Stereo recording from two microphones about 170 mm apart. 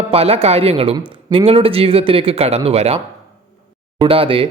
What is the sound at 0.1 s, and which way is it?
Speech, 35° right (ahead or behind).